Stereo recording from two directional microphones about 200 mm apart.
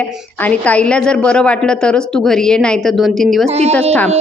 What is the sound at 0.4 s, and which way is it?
Speech, 5° left (ahead or behind).